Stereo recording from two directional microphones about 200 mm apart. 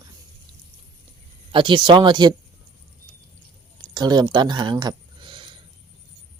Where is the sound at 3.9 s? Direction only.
20° right (ahead or behind).